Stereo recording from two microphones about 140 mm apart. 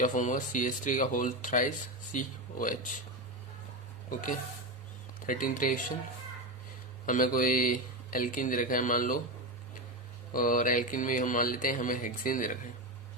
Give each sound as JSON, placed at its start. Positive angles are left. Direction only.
{"t": 0.0, "sound": "speech", "side_deg": 65}
{"t": 5.2, "sound": "speech", "side_deg": 75}
{"t": 7.0, "sound": "speech", "side_deg": 70}
{"t": 10.3, "sound": "speech", "side_deg": 80}